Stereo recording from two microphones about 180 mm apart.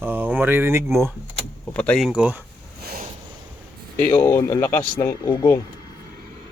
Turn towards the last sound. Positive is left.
turn(degrees=20)  # may be behind; listen again after turning